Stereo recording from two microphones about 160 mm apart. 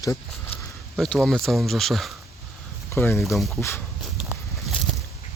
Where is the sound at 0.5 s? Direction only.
35° left (ahead or behind).